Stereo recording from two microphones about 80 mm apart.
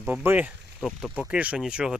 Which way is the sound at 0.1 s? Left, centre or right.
Right.